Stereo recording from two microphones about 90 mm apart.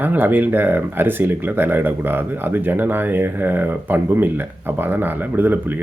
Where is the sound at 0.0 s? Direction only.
20° right (ahead or behind).